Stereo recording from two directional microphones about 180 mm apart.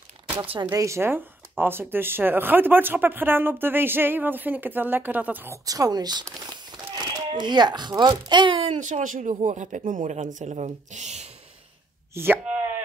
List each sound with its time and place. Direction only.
0.4 s a child's voice: 25° right (ahead or behind)
12.1 s speech: 10° right (ahead or behind)